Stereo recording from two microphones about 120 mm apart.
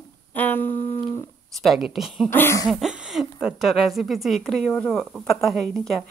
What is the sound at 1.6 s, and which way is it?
Speech, centre (ahead or behind).